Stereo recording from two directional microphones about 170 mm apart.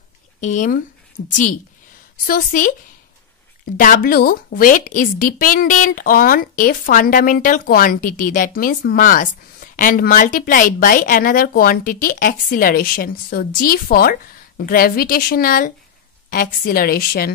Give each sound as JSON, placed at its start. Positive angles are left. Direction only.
{"t": 0.4, "sound": "a woman's voice", "side_deg": 45}
{"t": 2.2, "sound": "a woman's voice", "side_deg": 55}